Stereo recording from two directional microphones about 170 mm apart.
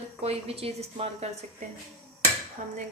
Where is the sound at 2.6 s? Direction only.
45° right (ahead or behind).